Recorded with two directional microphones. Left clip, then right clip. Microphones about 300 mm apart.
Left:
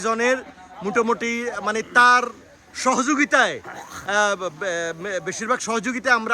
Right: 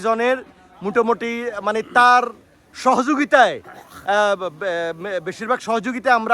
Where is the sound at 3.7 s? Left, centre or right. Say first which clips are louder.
Left 4 dB; left.